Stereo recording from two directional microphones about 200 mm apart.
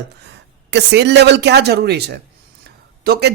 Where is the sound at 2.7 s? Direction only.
50° right (ahead or behind).